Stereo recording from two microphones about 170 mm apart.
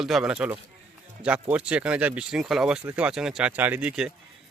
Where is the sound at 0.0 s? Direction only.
5° right (ahead or behind).